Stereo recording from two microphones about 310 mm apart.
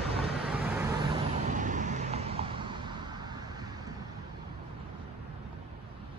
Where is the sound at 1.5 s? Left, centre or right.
Right.